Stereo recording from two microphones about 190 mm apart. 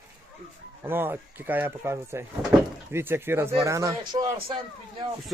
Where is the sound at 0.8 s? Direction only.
10° right (ahead or behind).